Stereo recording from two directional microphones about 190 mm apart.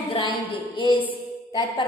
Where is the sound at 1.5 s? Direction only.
25° left (ahead or behind).